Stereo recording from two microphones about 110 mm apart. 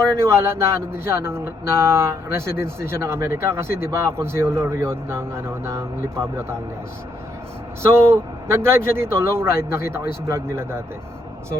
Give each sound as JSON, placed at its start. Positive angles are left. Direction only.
{"t": 0.2, "sound": "speech", "side_deg": -25}
{"t": 7.8, "sound": "speech", "side_deg": -25}